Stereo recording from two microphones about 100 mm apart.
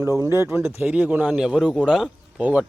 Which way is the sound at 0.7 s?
15° right (ahead or behind).